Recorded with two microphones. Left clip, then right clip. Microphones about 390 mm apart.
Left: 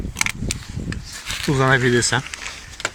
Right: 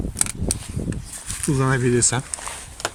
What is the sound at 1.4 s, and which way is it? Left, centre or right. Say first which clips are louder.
Speech: left 5 dB; centre.